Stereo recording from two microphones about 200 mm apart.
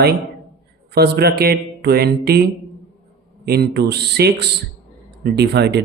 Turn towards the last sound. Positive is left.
turn(degrees=-55)  # may be behind; listen again after turning